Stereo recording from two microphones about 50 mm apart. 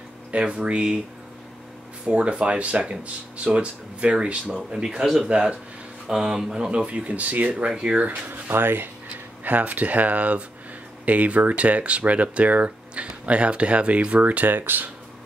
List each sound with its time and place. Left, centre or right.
0.3 s speech: right
2.0 s speech: right
7.5 s speech: centre
8.1 s speech: right
9.1 s speech: right